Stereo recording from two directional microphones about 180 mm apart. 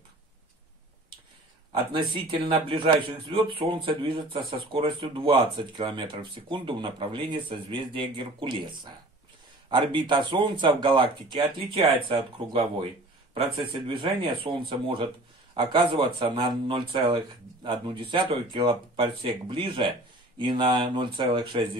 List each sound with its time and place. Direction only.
1.7 s a man's voice: 25° right (ahead or behind)
15.5 s a man's voice: 25° right (ahead or behind)